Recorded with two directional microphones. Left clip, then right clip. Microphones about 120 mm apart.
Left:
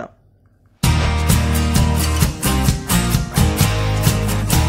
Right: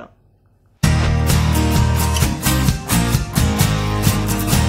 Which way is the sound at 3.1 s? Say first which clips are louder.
Even; centre (ahead or behind).